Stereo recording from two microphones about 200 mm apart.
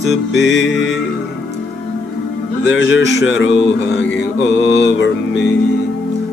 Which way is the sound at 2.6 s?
70° left (ahead or behind).